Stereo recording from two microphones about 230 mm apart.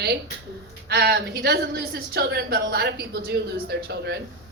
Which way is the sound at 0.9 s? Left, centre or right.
Right.